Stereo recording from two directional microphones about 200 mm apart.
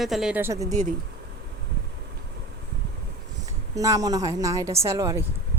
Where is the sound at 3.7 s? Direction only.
15° right (ahead or behind).